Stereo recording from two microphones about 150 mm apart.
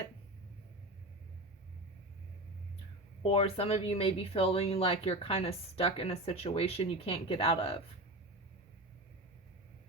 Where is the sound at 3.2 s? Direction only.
40° left (ahead or behind).